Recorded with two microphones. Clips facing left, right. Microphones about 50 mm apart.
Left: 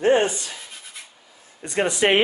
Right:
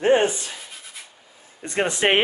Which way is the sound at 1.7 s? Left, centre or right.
Right.